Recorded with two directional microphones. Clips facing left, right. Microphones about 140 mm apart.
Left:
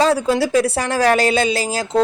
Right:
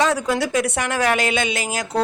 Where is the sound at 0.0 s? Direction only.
30° left (ahead or behind).